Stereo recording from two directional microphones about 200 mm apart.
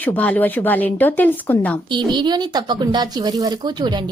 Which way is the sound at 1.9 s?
20° right (ahead or behind).